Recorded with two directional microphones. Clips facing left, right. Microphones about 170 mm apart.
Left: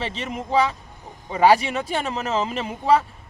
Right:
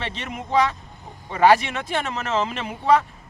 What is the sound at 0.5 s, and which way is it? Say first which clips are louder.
Speech: even; 5° left (ahead or behind).